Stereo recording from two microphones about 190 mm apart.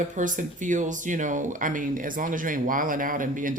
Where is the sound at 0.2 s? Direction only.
40° right (ahead or behind).